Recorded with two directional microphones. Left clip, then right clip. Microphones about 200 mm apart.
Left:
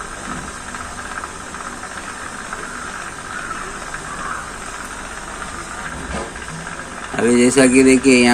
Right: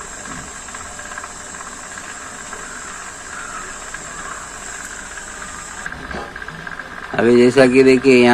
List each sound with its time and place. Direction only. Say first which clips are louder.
7.2 s speech: right 2 dB; 40° right (ahead or behind)